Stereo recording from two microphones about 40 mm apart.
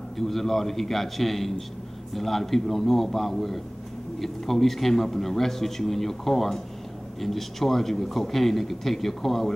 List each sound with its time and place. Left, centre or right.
0.2 s a man's voice: centre